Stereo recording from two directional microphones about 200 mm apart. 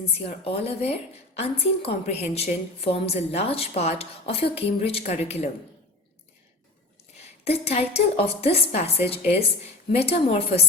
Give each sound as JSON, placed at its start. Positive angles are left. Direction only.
{"t": 0.2, "sound": "a woman's voice", "side_deg": 30}
{"t": 7.4, "sound": "a woman's voice", "side_deg": 30}